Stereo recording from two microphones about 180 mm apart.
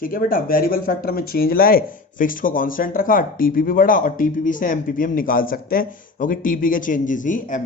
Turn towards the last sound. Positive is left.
turn(degrees=45)  # may be behind; listen again after turning